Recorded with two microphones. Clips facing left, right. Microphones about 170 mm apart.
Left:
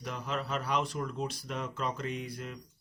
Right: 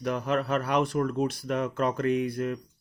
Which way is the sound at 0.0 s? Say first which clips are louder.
Right 9 dB; 60° right (ahead or behind).